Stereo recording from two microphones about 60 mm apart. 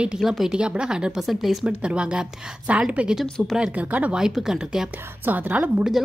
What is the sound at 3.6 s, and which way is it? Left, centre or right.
Speech, right.